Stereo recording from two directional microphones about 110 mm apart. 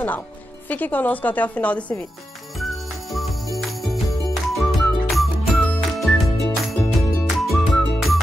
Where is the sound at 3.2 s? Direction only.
Centre (ahead or behind).